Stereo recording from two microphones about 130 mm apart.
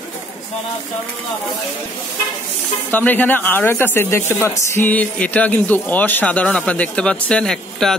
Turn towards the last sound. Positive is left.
turn(degrees=5)  # may be behind; listen again after turning